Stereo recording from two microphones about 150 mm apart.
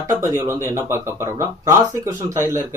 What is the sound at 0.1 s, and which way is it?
Speech, 20° right (ahead or behind).